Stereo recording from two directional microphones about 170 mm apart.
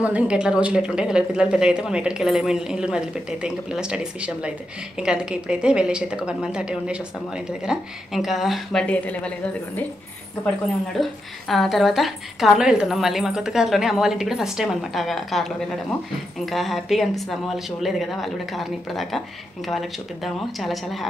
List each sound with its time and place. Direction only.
0.0 s a woman's voice: 5° right (ahead or behind)
11.0 s a woman's voice: centre (ahead or behind)